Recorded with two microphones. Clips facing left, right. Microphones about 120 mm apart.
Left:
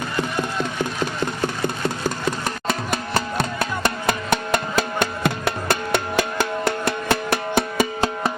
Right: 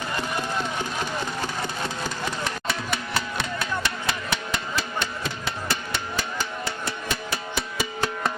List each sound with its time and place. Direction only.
1.6 s music: 45° left (ahead or behind)